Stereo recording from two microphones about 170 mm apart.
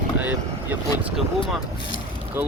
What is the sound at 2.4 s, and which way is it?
Speech, 10° right (ahead or behind).